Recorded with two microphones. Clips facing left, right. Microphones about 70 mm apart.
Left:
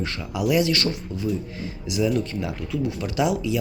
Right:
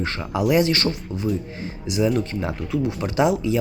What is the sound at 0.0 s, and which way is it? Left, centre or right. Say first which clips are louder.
Speech: right 3 dB; right.